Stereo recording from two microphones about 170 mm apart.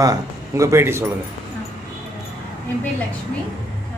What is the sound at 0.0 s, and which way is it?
A man's voice, 20° right (ahead or behind).